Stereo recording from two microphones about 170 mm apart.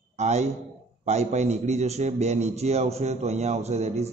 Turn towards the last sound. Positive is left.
turn(degrees=-40)  # may be behind; listen again after turning